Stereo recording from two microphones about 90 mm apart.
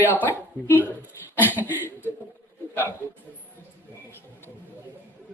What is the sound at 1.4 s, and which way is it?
Speech, 20° left (ahead or behind).